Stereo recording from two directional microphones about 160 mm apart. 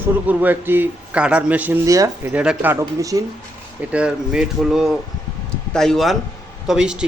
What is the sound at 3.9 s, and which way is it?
Speech, 5° right (ahead or behind).